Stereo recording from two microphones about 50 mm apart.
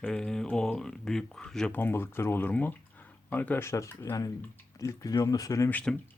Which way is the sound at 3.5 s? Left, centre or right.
Left.